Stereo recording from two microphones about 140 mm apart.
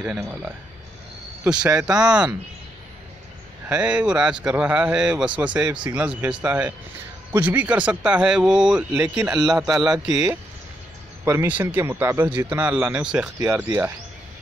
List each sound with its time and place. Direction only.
0.0 s speech: 10° right (ahead or behind)
3.6 s speech: 10° right (ahead or behind)
11.2 s speech: 15° right (ahead or behind)
13.4 s speech: 20° right (ahead or behind)